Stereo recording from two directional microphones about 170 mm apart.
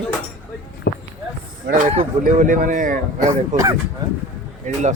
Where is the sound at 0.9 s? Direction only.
75° left (ahead or behind).